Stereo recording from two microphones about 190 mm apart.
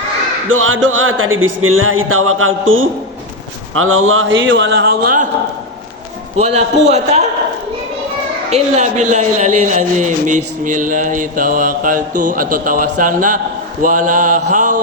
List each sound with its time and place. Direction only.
0.4 s a sound: 90° right; by 4.9 s 65° right (ahead or behind)
6.4 s a man's voice: 35° right (ahead or behind)
8.4 s a man's voice: 35° right (ahead or behind)